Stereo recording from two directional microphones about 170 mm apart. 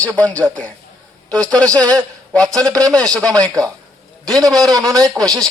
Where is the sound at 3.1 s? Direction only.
5° left (ahead or behind).